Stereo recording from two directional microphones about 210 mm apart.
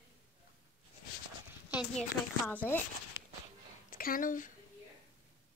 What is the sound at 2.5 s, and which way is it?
Speech, 10° left (ahead or behind).